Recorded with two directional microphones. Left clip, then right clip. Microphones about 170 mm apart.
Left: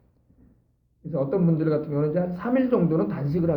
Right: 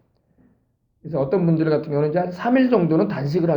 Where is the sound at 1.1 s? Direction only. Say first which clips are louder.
Right 4 dB; 35° right (ahead or behind).